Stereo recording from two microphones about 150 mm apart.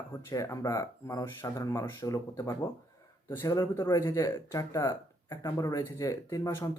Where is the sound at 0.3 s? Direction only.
20° left (ahead or behind).